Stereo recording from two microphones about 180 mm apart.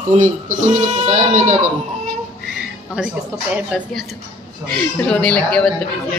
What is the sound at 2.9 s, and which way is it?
A woman's voice, 5° right (ahead or behind).